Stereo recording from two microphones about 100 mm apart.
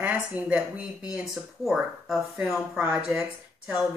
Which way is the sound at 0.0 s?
15° right (ahead or behind).